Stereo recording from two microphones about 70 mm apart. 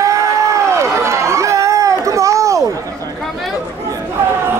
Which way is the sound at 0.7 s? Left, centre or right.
Right.